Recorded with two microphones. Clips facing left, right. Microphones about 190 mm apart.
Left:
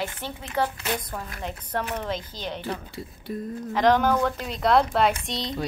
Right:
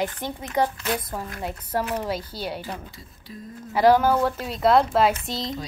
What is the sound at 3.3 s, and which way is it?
Speech, 50° left (ahead or behind).